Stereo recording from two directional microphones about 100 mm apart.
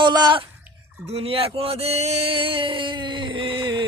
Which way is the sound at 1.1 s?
80° right.